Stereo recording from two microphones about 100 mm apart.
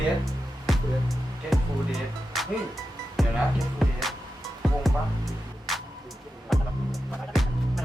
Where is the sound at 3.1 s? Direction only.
Centre (ahead or behind).